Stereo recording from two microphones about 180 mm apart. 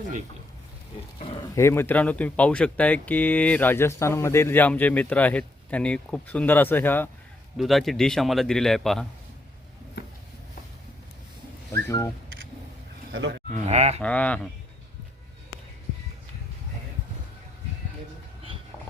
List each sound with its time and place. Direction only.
1.2 s speech: 30° left (ahead or behind)
1.5 s speech: 15° left (ahead or behind)
7.5 s a man's voice: centre (ahead or behind)
11.7 s speech: 15° left (ahead or behind)
13.7 s speech: 35° right (ahead or behind)
14.0 s speech: 5° left (ahead or behind)